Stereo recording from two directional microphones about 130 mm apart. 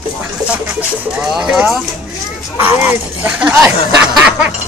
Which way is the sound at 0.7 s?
10° right (ahead or behind).